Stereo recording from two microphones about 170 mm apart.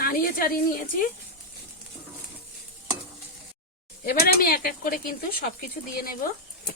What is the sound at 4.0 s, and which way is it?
Speech, 60° left (ahead or behind).